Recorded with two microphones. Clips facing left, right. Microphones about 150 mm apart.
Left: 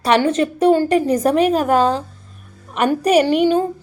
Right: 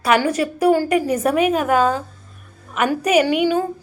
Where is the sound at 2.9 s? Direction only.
10° right (ahead or behind).